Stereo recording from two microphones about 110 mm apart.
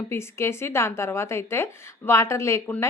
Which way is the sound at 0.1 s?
25° left (ahead or behind).